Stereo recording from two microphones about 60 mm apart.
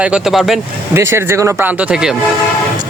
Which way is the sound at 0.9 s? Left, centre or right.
Right.